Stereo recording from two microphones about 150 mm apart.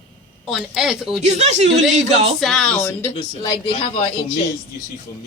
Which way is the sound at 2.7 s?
15° left (ahead or behind).